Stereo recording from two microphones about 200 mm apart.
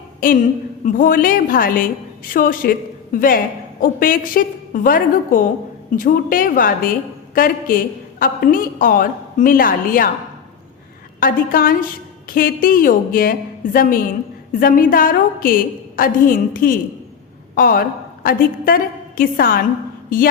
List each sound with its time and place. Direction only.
0.2 s a woman's voice: 45° left (ahead or behind)
11.2 s a woman's voice: 45° left (ahead or behind)
14.5 s a woman's voice: 45° left (ahead or behind)